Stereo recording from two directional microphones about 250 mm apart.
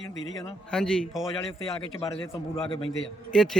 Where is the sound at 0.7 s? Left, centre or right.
Centre.